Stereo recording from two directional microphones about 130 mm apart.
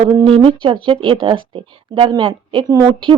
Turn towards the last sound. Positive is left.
turn(degrees=-30)  # may be behind; listen again after turning